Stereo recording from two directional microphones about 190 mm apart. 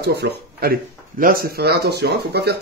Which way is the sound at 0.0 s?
60° right (ahead or behind).